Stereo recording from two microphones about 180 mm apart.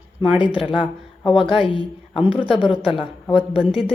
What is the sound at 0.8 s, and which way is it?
A woman's voice, 30° left (ahead or behind).